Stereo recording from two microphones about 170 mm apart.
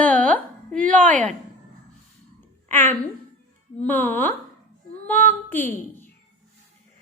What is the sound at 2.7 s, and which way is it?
A child's voice, 10° left (ahead or behind).